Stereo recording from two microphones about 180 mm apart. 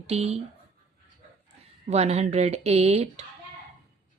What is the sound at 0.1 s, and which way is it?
Speech, 35° right (ahead or behind).